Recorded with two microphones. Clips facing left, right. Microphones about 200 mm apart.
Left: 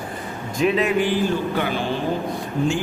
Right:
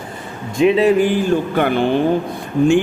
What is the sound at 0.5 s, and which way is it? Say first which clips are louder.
Speech: right 7 dB; 30° right (ahead or behind).